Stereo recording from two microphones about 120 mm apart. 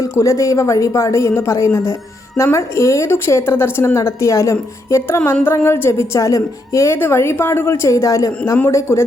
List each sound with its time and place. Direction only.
0.0 s speech: 30° left (ahead or behind)